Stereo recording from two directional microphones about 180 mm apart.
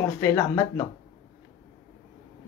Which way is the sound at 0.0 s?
15° left (ahead or behind).